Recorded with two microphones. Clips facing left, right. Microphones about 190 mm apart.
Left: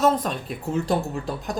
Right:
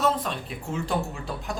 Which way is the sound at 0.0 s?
40° left (ahead or behind).